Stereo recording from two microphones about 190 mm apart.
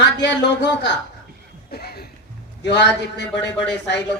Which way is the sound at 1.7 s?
55° left (ahead or behind).